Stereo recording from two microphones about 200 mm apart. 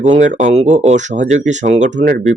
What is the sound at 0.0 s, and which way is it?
Speech, 35° right (ahead or behind).